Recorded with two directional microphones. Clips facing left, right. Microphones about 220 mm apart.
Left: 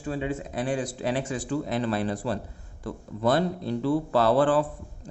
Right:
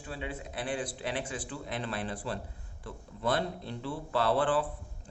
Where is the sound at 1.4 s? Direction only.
40° left (ahead or behind).